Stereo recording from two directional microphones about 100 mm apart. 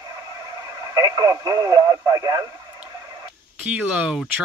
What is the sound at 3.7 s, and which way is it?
Speech, 10° right (ahead or behind).